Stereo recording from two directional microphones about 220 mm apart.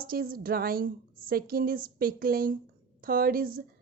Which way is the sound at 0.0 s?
40° right (ahead or behind).